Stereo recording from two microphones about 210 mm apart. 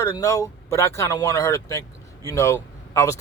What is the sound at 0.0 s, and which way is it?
Speech, 15° left (ahead or behind).